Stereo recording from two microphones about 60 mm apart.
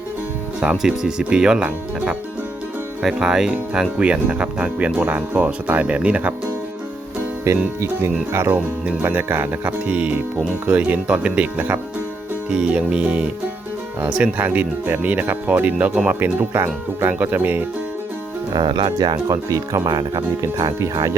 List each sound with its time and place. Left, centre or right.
0.6 s speech: centre
3.0 s speech: centre
7.5 s music: right
7.8 s speech: right
8.5 s speech: right
14.3 s speech: right
16.2 s speech: right
18.5 s speech: right
20.4 s speech: right